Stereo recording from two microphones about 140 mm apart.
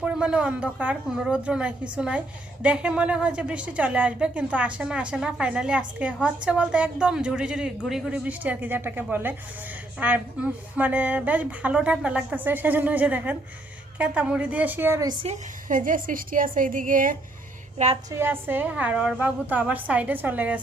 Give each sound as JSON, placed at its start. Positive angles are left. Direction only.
{"t": 0.0, "sound": "a woman's voice", "side_deg": -5}
{"t": 15.7, "sound": "a woman's voice", "side_deg": -75}
{"t": 18.1, "sound": "a woman's voice", "side_deg": -15}